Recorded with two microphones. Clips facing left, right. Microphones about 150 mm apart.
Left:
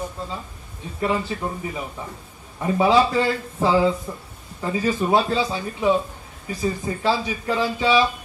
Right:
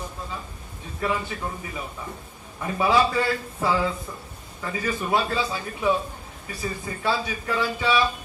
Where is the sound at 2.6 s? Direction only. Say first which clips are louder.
Left 4 dB; 25° left (ahead or behind).